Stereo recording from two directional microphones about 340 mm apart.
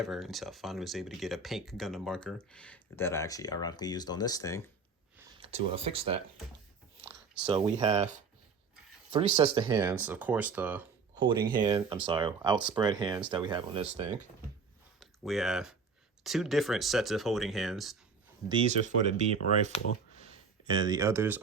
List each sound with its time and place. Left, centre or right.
0.0 s speech: centre
5.4 s speech: centre
9.1 s speech: centre
15.2 s speech: centre
18.4 s speech: centre
20.7 s speech: centre